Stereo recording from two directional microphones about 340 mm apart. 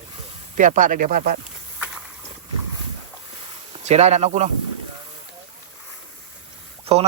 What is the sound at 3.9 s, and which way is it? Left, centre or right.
Speech, centre.